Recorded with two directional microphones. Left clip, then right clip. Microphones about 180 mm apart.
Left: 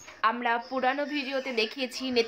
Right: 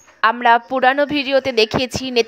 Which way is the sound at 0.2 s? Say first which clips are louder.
Right 13 dB; 50° right (ahead or behind).